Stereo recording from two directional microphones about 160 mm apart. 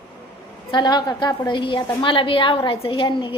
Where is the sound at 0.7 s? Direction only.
25° left (ahead or behind).